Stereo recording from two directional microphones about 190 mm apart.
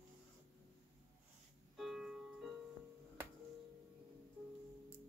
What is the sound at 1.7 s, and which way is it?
Music, centre (ahead or behind).